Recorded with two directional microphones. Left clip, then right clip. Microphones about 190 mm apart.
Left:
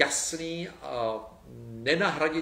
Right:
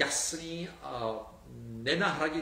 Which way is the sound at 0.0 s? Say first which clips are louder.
Left 5 dB; 10° left (ahead or behind).